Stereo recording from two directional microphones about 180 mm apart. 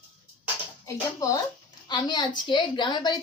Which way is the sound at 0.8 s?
20° left (ahead or behind).